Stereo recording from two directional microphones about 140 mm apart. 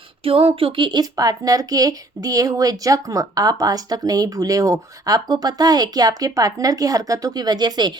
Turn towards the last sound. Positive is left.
turn(degrees=-30)  # may be behind; listen again after turning